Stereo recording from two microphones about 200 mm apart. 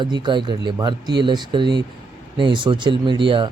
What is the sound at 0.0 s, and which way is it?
Speech, 20° right (ahead or behind).